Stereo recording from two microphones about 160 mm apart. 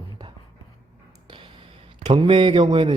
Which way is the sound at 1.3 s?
35° right (ahead or behind).